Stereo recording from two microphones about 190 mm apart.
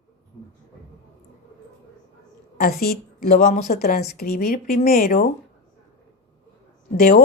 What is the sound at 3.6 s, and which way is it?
A woman's voice, 55° left (ahead or behind).